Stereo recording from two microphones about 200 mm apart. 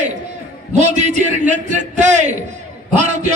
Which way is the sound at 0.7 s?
35° right (ahead or behind).